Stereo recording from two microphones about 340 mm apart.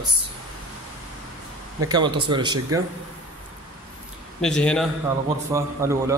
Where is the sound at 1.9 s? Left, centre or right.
Centre.